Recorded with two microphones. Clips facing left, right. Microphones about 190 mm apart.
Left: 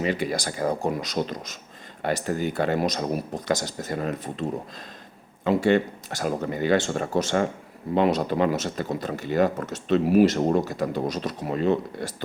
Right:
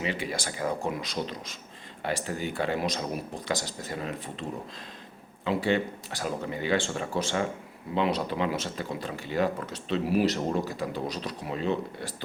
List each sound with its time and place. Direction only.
0.0 s speech: 40° left (ahead or behind)
5.5 s speech: 45° left (ahead or behind)